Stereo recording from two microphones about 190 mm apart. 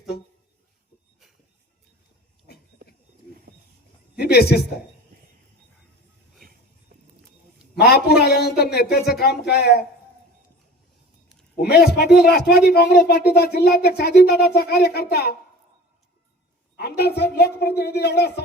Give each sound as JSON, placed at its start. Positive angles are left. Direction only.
{"t": 4.2, "sound": "speech", "side_deg": 55}
{"t": 7.9, "sound": "speech", "side_deg": 55}
{"t": 11.7, "sound": "speech", "side_deg": 55}
{"t": 16.7, "sound": "speech", "side_deg": 60}